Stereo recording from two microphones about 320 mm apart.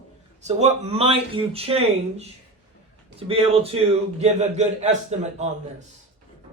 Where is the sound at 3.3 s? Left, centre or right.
Centre.